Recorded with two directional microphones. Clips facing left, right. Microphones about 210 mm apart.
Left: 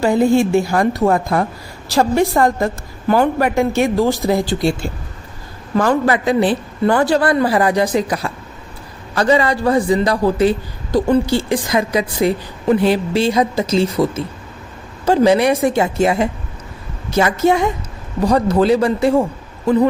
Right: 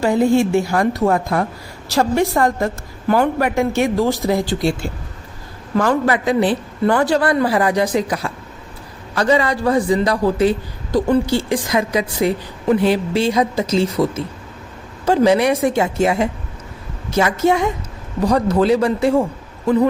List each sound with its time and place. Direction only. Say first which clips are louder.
0.0 s a woman's voice: left 1 dB; 35° left (ahead or behind)
5.7 s a woman's voice: left 1 dB; 30° left (ahead or behind)